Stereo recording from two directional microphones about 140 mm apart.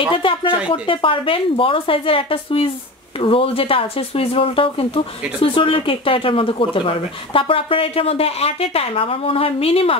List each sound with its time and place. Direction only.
0.1 s speech: 40° left (ahead or behind)